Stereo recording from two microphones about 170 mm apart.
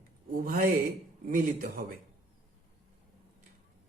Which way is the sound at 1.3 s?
60° right (ahead or behind).